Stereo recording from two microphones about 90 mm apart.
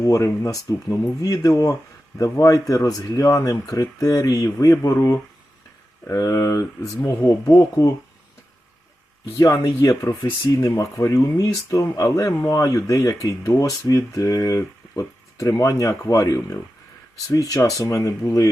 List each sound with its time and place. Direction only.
0.0 s speech: 40° left (ahead or behind)
9.4 s speech: 35° left (ahead or behind)